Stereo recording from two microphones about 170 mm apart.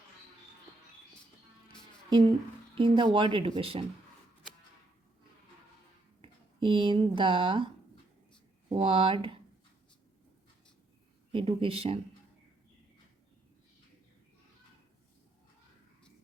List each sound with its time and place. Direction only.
2.7 s speech: 30° right (ahead or behind)
6.2 s speech: 30° right (ahead or behind)
8.7 s speech: 30° right (ahead or behind)
11.3 s speech: 30° right (ahead or behind)